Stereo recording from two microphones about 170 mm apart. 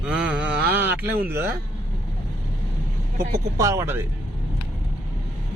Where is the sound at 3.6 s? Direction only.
20° right (ahead or behind).